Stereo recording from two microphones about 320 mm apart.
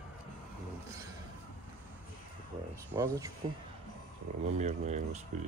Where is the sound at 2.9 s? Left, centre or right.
Centre.